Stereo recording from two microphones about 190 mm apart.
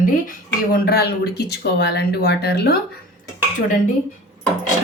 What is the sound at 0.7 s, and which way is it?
Speech, 55° left (ahead or behind).